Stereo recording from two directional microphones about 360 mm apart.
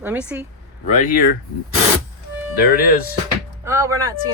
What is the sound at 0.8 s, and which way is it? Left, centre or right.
Speech, centre.